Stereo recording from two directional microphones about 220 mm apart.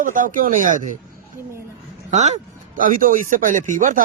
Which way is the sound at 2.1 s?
30° right (ahead or behind).